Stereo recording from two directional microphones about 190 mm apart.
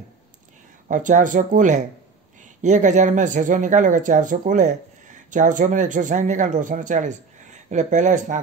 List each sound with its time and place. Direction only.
0.8 s speech: 40° right (ahead or behind)